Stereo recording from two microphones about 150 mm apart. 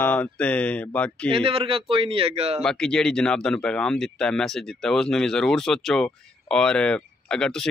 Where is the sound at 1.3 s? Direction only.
35° right (ahead or behind).